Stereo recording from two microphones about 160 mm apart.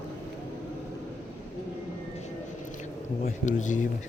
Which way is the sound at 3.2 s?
50° left (ahead or behind).